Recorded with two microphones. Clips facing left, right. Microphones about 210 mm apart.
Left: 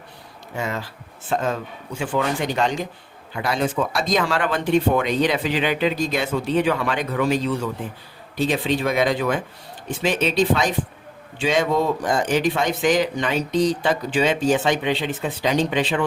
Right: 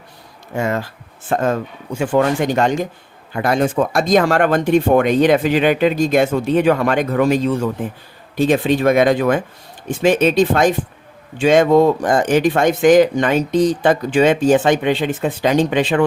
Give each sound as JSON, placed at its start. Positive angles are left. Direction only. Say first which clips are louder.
{"t": 0.5, "sound": "speech", "louder": "right 7 dB", "side_deg": -50}